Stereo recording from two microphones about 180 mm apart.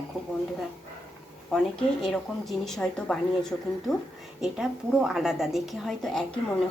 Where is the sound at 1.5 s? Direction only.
5° left (ahead or behind).